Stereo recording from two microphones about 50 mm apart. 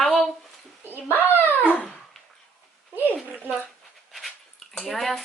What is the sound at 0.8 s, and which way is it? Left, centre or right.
Dog, right.